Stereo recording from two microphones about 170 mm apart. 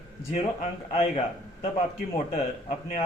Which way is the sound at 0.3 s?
40° left (ahead or behind).